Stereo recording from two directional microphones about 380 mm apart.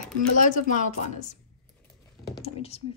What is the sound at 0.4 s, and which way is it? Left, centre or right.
A woman's voice, centre.